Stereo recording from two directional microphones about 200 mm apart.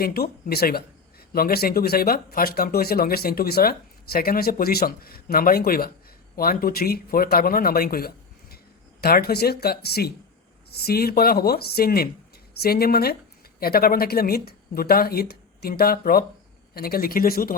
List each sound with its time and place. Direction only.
0.0 s speech: 50° left (ahead or behind)